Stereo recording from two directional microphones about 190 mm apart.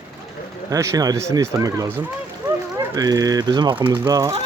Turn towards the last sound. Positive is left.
turn(degrees=-20)  # may be behind; listen again after turning